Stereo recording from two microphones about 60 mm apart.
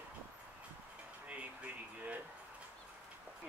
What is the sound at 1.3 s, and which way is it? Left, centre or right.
Speech, right.